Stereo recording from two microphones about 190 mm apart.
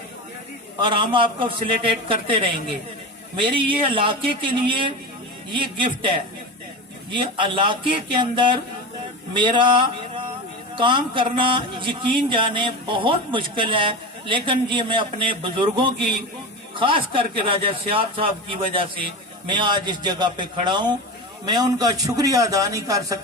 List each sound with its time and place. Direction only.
0.9 s a man's voice: 25° right (ahead or behind)
7.1 s a man's voice: 25° right (ahead or behind)
9.3 s a sound: 25° right (ahead or behind)
10.8 s a man's voice: 25° right (ahead or behind)